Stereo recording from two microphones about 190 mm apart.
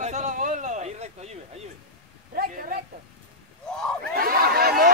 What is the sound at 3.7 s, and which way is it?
Crowd, centre (ahead or behind).